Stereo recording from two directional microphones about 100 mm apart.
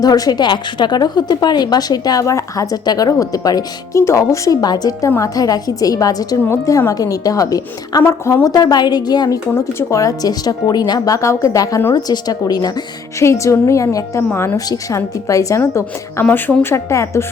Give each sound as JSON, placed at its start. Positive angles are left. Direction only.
{"t": 0.0, "sound": "a woman's voice", "side_deg": 40}
{"t": 8.0, "sound": "a woman's voice", "side_deg": 25}
{"t": 13.2, "sound": "a woman's voice", "side_deg": 30}